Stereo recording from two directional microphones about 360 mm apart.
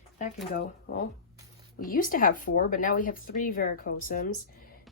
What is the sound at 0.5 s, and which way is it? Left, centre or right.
Speech, left.